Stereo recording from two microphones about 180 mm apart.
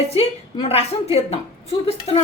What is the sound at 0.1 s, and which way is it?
A woman's voice, 35° left (ahead or behind).